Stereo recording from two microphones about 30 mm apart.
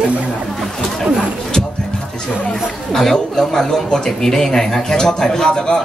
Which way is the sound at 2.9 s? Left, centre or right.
Centre.